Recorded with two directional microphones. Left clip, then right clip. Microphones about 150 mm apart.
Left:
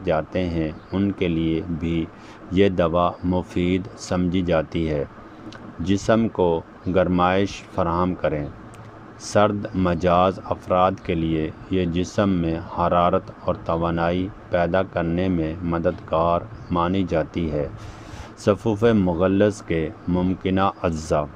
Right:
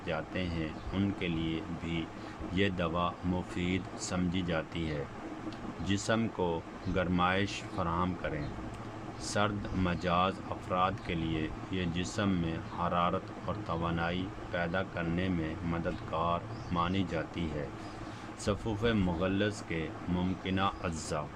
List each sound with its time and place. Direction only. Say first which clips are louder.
0.0 s speech: left 13 dB; 45° left (ahead or behind)
18.4 s speech: left 14 dB; 45° left (ahead or behind)